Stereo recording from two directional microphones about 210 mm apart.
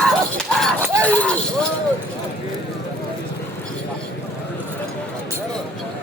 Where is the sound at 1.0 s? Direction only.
5° left (ahead or behind).